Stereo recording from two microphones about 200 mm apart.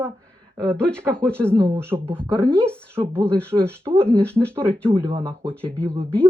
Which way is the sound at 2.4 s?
5° left (ahead or behind).